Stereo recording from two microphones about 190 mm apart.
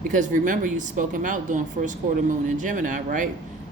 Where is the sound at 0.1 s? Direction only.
40° right (ahead or behind).